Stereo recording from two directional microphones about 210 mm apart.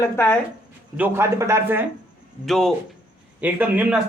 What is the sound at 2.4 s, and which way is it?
Speech, centre (ahead or behind).